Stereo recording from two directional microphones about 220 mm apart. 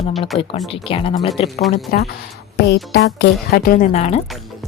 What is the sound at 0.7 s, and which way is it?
Speech, 25° left (ahead or behind).